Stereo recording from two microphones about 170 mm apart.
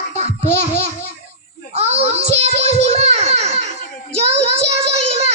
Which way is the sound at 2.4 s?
40° right (ahead or behind).